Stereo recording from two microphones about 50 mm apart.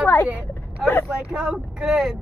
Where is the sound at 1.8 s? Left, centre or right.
Centre.